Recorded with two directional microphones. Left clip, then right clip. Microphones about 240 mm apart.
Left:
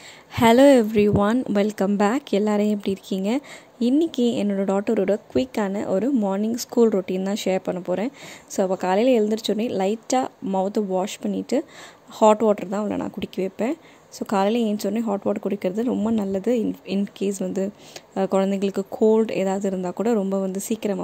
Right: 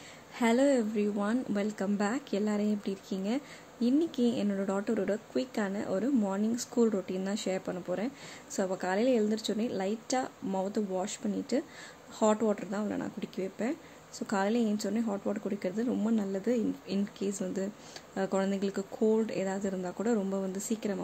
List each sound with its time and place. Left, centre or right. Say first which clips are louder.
0.4 s a woman's voice: left 13 dB; left